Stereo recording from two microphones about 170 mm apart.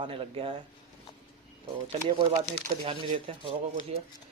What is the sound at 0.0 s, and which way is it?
Speech, 30° right (ahead or behind).